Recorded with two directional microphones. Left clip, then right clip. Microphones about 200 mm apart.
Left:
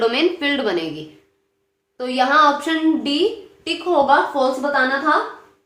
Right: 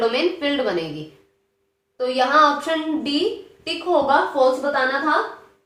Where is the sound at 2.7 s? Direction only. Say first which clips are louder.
Left 4 dB; 30° left (ahead or behind).